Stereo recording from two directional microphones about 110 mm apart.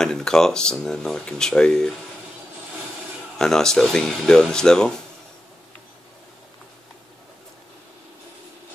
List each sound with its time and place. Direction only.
0.0 s speech: 5° left (ahead or behind)
3.3 s speech: 5° left (ahead or behind)